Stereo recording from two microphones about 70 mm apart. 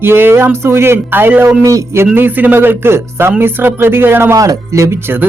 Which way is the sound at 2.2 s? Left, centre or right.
Right.